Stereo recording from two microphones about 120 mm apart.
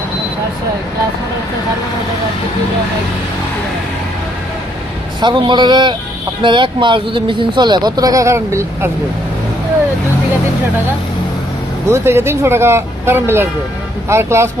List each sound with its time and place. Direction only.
5.2 s speech: 40° right (ahead or behind); by 8.9 s 25° right (ahead or behind)
11.9 s speech: 20° right (ahead or behind)